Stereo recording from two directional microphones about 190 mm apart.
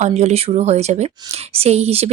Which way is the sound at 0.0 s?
35° right (ahead or behind).